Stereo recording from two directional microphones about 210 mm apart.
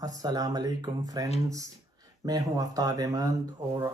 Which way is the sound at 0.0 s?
15° right (ahead or behind).